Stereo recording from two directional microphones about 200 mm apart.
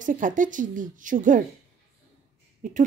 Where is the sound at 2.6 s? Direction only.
40° right (ahead or behind).